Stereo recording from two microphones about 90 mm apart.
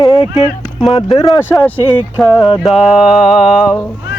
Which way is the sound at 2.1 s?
Centre (ahead or behind).